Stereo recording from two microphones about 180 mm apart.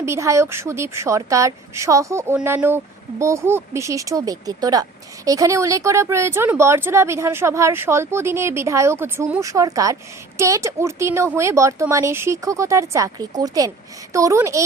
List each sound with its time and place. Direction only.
0.0 s speech: 15° right (ahead or behind)